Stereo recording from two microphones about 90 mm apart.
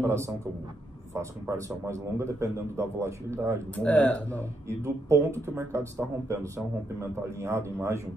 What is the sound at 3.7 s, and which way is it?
Speech, 15° left (ahead or behind).